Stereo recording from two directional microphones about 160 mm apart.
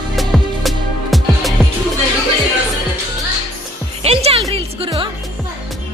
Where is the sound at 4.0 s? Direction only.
40° right (ahead or behind).